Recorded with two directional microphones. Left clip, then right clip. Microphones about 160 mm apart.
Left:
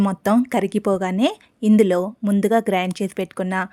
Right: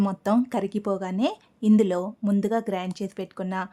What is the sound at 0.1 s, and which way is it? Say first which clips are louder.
A woman's voice: left 5 dB; 30° left (ahead or behind).